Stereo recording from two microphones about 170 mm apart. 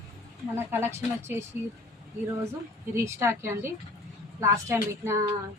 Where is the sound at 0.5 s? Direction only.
15° right (ahead or behind).